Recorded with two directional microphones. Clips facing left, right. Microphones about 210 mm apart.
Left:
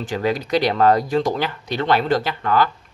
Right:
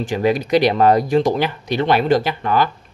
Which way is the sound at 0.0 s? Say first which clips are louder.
Right 4 dB; 15° right (ahead or behind).